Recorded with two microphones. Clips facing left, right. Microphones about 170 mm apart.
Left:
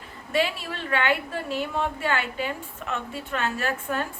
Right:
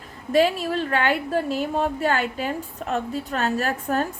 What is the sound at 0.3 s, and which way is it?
A woman's voice, 40° right (ahead or behind).